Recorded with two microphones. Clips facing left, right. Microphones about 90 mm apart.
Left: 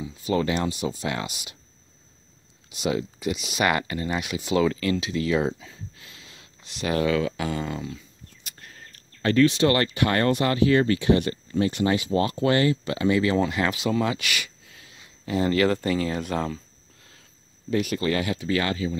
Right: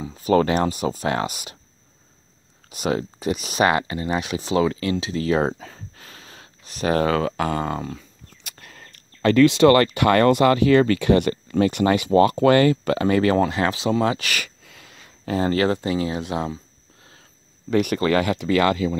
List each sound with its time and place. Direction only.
0.0 s speech: 40° right (ahead or behind)
2.7 s speech: 45° right (ahead or behind)
8.5 s speech: 90° right; by 13.5 s 45° right (ahead or behind)
13.5 s speech: 30° right (ahead or behind)
14.6 s sneeze: 65° right (ahead or behind)
15.2 s speech: 35° right (ahead or behind); by 16.5 s 20° right (ahead or behind)
17.0 s a sound: 30° right (ahead or behind)
17.6 s speech: 60° right (ahead or behind)